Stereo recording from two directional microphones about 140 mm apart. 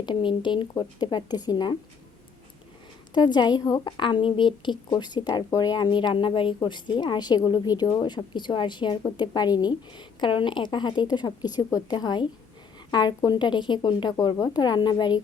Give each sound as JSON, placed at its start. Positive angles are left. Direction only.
{"t": 0.0, "sound": "a woman's voice", "side_deg": 35}
{"t": 3.2, "sound": "a woman's voice", "side_deg": 30}